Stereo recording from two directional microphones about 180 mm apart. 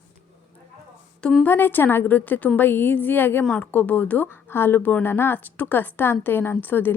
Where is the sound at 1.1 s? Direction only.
5° left (ahead or behind).